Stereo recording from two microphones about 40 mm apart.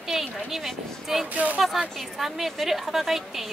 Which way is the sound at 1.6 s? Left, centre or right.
Centre.